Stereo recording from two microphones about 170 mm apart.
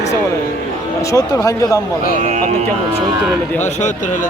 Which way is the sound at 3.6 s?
45° left (ahead or behind).